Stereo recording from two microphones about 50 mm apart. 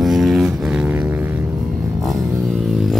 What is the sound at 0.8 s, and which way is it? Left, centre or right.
Vehicle, right.